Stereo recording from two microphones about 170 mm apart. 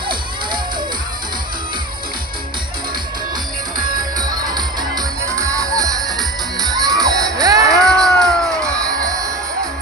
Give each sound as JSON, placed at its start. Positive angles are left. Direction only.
{"t": 3.8, "sound": "music", "side_deg": -25}
{"t": 6.1, "sound": "music", "side_deg": 0}
{"t": 6.8, "sound": "music", "side_deg": -20}
{"t": 7.8, "sound": "a sound", "side_deg": 0}